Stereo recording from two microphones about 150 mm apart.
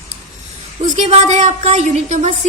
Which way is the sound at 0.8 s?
50° right (ahead or behind).